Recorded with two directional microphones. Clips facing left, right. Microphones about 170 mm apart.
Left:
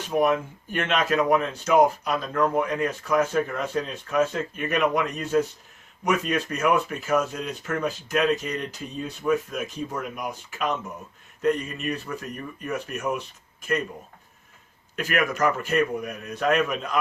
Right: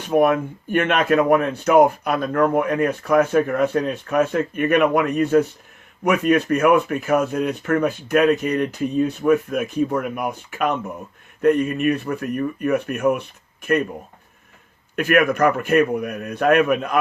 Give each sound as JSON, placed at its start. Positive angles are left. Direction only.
{"t": 0.1, "sound": "speech", "side_deg": -55}
{"t": 14.9, "sound": "speech", "side_deg": -60}